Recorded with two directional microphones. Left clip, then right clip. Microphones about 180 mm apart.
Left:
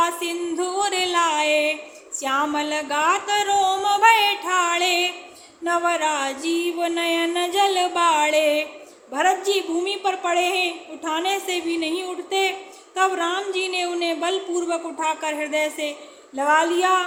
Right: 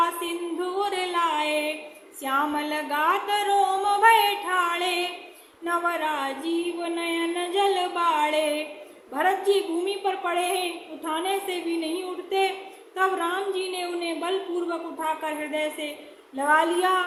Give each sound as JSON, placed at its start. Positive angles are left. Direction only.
{"t": 0.0, "sound": "music", "side_deg": 25}
{"t": 9.1, "sound": "a woman's voice", "side_deg": 15}